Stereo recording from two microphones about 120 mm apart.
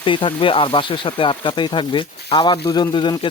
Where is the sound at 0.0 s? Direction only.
45° left (ahead or behind).